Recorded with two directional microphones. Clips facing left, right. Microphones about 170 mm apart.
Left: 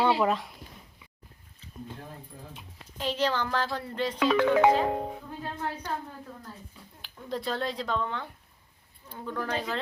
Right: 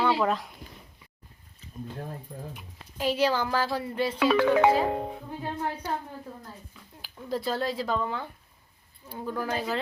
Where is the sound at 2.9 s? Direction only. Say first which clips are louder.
Right 3 dB; 10° right (ahead or behind).